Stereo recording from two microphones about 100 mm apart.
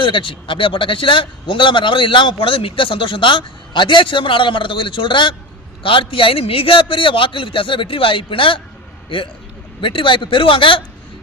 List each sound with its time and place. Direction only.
0.0 s a man's voice: 55° left (ahead or behind)